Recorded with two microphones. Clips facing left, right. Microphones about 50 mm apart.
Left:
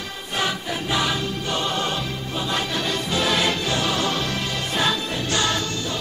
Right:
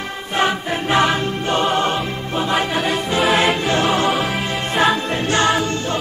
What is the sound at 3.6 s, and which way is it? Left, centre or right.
Music, right.